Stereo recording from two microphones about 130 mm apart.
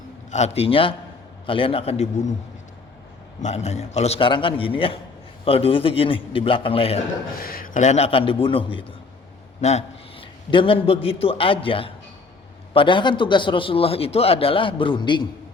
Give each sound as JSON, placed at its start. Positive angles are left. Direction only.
{"t": 0.3, "sound": "a man's voice", "side_deg": 60}
{"t": 3.4, "sound": "a man's voice", "side_deg": 60}
{"t": 4.3, "sound": "a man's voice", "side_deg": 40}
{"t": 7.6, "sound": "a man's voice", "side_deg": 75}
{"t": 9.6, "sound": "a man's voice", "side_deg": 60}
{"t": 10.2, "sound": "a man's voice", "side_deg": 40}